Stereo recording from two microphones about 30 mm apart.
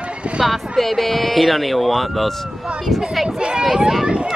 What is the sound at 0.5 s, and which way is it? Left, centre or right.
Speech, centre.